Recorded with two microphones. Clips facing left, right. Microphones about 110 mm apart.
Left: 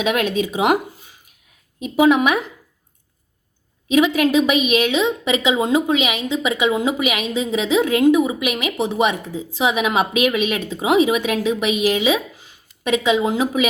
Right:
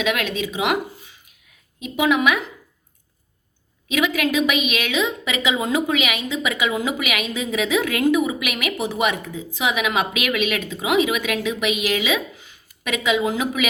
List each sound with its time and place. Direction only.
0.0 s a woman's voice: 40° left (ahead or behind)
1.8 s a woman's voice: 35° left (ahead or behind)
3.8 s a woman's voice: 35° left (ahead or behind)